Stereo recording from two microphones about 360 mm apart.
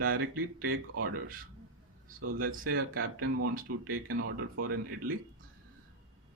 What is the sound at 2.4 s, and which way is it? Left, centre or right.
Speech, right.